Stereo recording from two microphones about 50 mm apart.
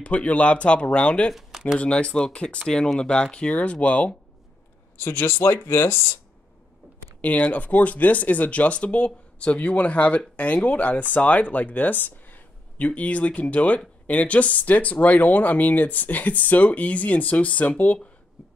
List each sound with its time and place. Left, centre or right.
0.0 s speech: left
1.3 s speech: centre
1.8 s speech: left
4.9 s speech: left
5.2 s speech: left
7.2 s speech: left